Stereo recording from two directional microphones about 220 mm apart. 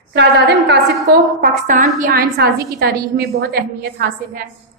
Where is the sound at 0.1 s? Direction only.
50° right (ahead or behind).